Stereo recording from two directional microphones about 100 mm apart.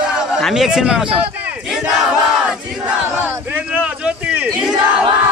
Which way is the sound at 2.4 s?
15° right (ahead or behind).